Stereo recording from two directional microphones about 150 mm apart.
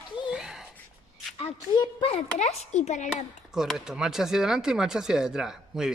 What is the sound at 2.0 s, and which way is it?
A child's voice, 45° left (ahead or behind).